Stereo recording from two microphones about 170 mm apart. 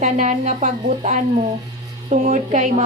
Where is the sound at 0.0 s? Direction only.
45° right (ahead or behind).